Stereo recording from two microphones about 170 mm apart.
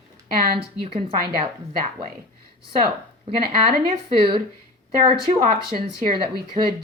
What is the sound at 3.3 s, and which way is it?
Speech, 60° right (ahead or behind).